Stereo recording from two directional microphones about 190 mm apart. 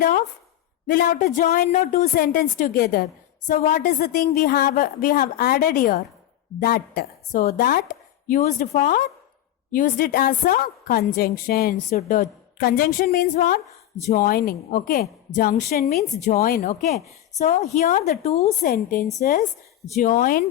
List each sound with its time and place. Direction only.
0.9 s a woman's voice: 50° left (ahead or behind)
2.1 s a woman's voice: 50° left (ahead or behind)
8.4 s a woman's voice: 35° left (ahead or behind)
16.6 s a woman's voice: 35° left (ahead or behind)
18.6 s a woman's voice: 50° left (ahead or behind)